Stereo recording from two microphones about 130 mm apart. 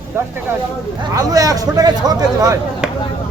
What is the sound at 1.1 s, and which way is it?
A man's voice, 25° right (ahead or behind).